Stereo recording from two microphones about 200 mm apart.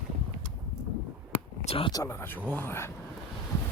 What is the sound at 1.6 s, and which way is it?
Speech, 30° left (ahead or behind).